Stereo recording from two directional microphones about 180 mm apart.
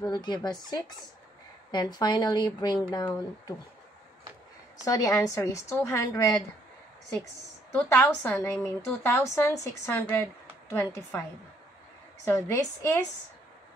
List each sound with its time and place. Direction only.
0.0 s speech: 25° left (ahead or behind)
4.8 s a woman's voice: 20° left (ahead or behind)
7.7 s a woman's voice: 10° left (ahead or behind)
12.3 s a woman's voice: 15° left (ahead or behind)